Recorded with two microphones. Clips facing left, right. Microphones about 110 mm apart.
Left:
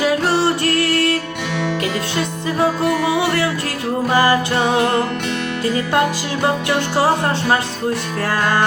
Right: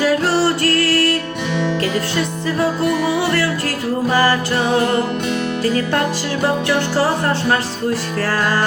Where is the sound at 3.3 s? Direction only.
20° left (ahead or behind).